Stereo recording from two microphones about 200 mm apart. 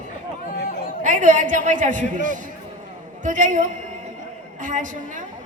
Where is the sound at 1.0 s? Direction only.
40° right (ahead or behind).